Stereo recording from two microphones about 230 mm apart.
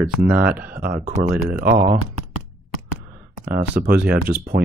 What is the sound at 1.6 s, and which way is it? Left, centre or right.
Speech, right.